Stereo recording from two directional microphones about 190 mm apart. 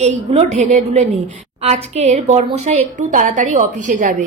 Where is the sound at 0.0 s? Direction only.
35° right (ahead or behind).